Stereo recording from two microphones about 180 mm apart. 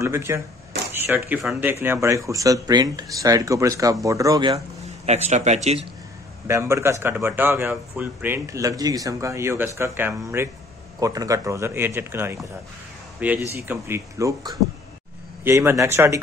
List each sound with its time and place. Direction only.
0.0 s speech: 15° right (ahead or behind)
5.0 s speech: 40° right (ahead or behind)
6.4 s speech: 15° right (ahead or behind)
13.5 s speech: 15° right (ahead or behind)